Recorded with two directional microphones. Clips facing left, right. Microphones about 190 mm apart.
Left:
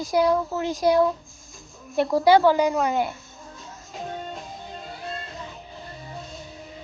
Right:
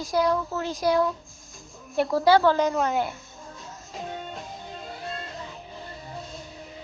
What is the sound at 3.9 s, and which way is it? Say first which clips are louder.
Music: left 1 dB; centre (ahead or behind).